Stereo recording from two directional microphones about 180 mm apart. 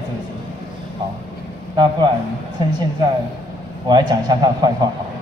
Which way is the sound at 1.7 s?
25° right (ahead or behind).